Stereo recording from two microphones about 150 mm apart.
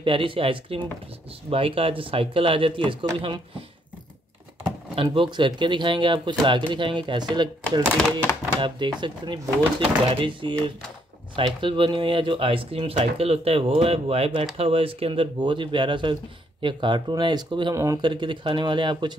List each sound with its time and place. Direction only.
0.0 s speech: 35° right (ahead or behind)
4.9 s speech: 35° right (ahead or behind)
7.8 s speech: 5° left (ahead or behind)
8.5 s speech: 35° right (ahead or behind)